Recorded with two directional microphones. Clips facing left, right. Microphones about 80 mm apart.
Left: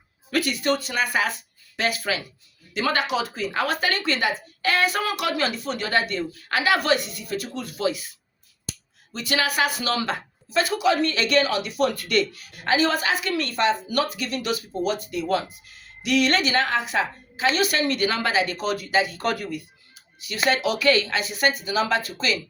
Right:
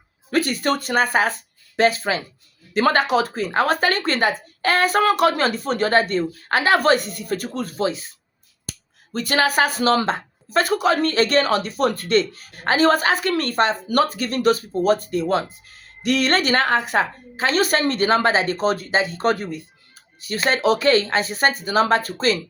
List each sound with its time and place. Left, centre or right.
0.3 s speech: right
8.7 s finger snapping: right
9.1 s speech: right
20.2 s speech: right